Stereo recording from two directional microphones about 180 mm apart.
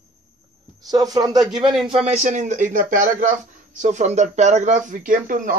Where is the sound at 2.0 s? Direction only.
40° right (ahead or behind).